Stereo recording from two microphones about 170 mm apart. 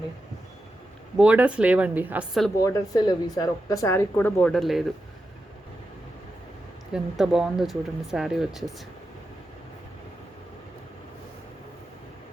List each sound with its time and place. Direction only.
1.1 s a woman's voice: 5° right (ahead or behind)
2.6 s speech: 20° left (ahead or behind); by 4.9 s centre (ahead or behind)
6.9 s speech: centre (ahead or behind)